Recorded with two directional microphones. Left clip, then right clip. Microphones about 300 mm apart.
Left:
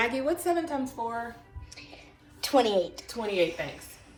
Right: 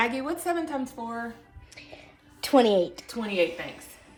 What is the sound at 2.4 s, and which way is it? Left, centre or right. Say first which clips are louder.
Speech: right 3 dB; right.